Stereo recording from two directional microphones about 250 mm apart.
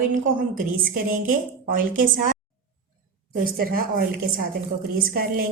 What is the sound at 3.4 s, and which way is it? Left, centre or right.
A woman's voice, right.